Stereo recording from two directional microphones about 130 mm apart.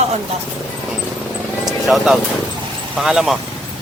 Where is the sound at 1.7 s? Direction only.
Centre (ahead or behind).